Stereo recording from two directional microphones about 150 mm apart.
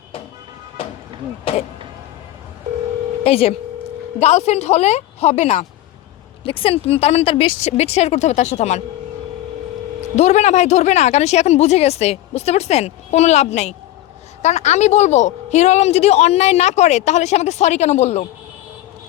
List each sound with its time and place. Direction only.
3.2 s a woman's voice: 40° left (ahead or behind)
10.2 s a woman's voice: 50° left (ahead or behind)